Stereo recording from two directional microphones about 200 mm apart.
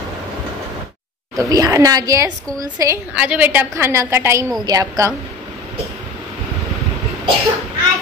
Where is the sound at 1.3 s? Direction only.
15° right (ahead or behind).